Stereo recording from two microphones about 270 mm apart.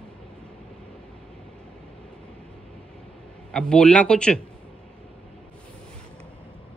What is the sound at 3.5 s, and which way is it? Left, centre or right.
Speech, centre.